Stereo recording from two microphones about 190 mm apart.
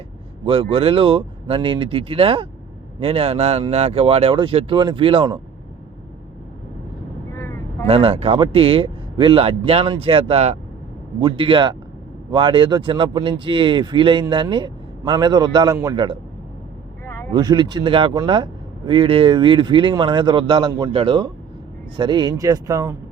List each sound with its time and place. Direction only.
0.4 s speech: 25° right (ahead or behind)
7.3 s vehicle: 15° left (ahead or behind)
7.9 s speech: 30° right (ahead or behind)
17.1 s a sound: 10° left (ahead or behind)
17.3 s speech: 25° right (ahead or behind)